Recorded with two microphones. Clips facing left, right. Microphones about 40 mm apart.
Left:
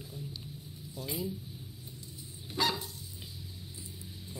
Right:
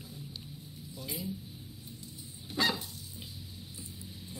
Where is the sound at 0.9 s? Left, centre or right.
Left.